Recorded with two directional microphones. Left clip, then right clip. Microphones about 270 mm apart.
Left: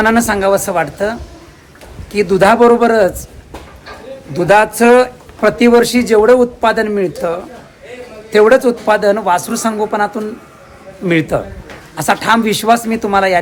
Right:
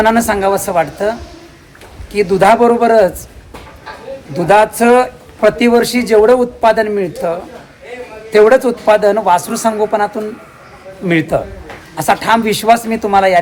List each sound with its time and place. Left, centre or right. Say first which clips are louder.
0.0 s speech: right 1 dB; centre
2.1 s speech: even; centre
4.4 s speech: even; centre